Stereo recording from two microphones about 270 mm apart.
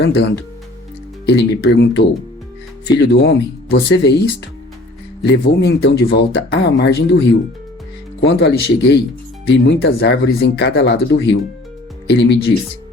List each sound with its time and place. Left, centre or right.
0.0 s speech: left
1.3 s speech: left
5.2 s speech: left
8.2 s speech: left